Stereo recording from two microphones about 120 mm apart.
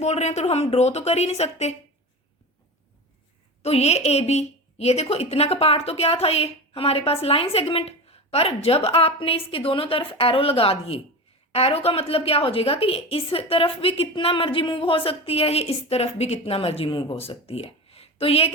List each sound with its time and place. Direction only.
0.0 s a woman's voice: 70° left (ahead or behind)
3.6 s a woman's voice: 60° left (ahead or behind)